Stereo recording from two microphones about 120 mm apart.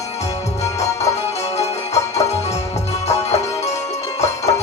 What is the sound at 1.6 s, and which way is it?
Music, 65° left (ahead or behind).